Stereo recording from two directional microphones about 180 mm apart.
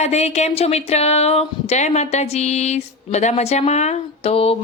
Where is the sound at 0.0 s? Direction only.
35° left (ahead or behind).